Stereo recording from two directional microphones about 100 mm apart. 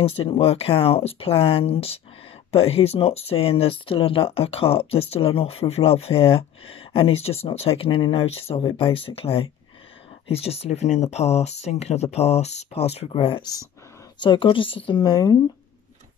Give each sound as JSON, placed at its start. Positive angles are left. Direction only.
{"t": 0.0, "sound": "speech", "side_deg": 70}
{"t": 7.5, "sound": "speech", "side_deg": 75}
{"t": 10.2, "sound": "speech", "side_deg": 85}
{"t": 14.2, "sound": "speech", "side_deg": 55}